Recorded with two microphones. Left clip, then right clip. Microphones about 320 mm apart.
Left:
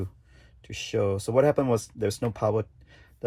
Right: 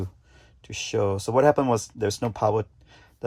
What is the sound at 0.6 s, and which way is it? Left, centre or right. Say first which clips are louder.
Speech: right 2 dB; right.